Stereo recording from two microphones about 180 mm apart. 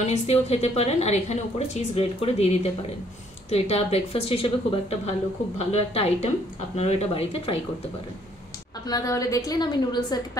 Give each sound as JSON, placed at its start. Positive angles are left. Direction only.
{"t": 0.0, "sound": "a woman's voice", "side_deg": 35}
{"t": 8.8, "sound": "a woman's voice", "side_deg": 20}